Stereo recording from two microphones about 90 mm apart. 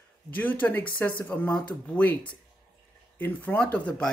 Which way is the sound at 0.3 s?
20° left (ahead or behind).